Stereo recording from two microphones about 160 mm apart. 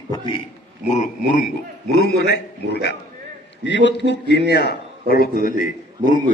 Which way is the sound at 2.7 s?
90° left.